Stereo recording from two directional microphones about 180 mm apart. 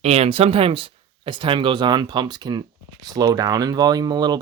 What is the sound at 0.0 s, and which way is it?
Speech, 35° right (ahead or behind).